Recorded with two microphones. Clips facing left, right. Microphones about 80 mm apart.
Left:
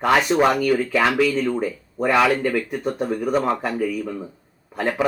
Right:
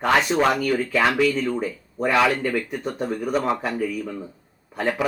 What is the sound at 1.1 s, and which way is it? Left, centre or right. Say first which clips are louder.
Speech: left 1 dB; centre.